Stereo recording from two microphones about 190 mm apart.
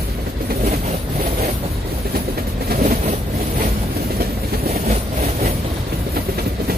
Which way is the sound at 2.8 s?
40° right (ahead or behind).